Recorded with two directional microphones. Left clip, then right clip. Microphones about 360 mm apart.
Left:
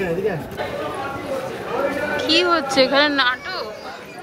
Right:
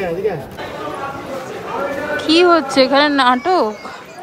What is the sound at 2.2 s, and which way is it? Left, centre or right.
Speech, centre.